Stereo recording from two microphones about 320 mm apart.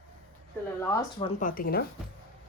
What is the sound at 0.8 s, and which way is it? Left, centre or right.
Speech, centre.